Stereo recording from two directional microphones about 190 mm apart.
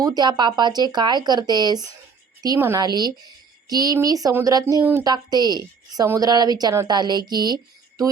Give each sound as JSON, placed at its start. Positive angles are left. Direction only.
{"t": 0.0, "sound": "a woman's voice", "side_deg": -20}